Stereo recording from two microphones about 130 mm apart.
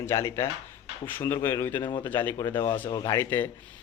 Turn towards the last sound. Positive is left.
turn(degrees=15)  # may be behind; listen again after turning